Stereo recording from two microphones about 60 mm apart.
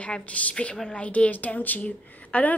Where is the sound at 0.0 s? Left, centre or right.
Left.